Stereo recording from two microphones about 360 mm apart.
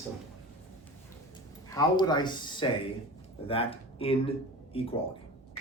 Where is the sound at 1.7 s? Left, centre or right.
Centre.